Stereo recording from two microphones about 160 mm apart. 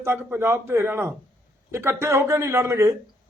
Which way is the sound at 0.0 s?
15° right (ahead or behind).